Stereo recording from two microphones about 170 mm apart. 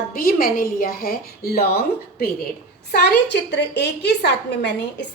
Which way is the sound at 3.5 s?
80° left.